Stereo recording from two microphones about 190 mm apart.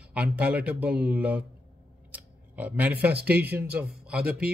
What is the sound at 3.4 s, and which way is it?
Speech, 10° right (ahead or behind).